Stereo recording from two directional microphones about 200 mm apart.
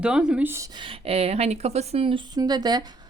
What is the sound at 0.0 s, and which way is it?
Speech, 5° right (ahead or behind).